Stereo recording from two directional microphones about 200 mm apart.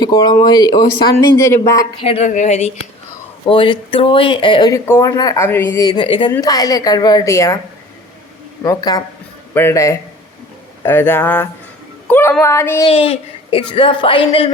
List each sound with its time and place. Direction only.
0.0 s speech: 20° left (ahead or behind)
2.1 s a woman's voice: 35° left (ahead or behind); by 7.6 s 15° left (ahead or behind)
8.6 s a woman's voice: 15° left (ahead or behind)
12.9 s speech: 30° left (ahead or behind)